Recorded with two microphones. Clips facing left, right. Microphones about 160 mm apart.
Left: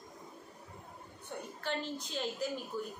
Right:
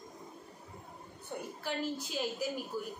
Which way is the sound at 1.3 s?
10° right (ahead or behind).